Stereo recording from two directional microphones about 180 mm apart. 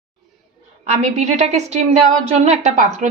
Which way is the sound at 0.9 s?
40° right (ahead or behind).